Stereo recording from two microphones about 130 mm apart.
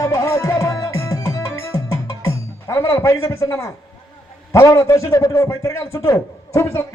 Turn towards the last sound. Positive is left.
turn(degrees=25)  # may be behind; listen again after turning